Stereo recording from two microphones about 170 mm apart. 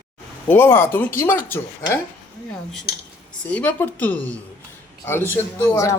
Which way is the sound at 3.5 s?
10° left (ahead or behind).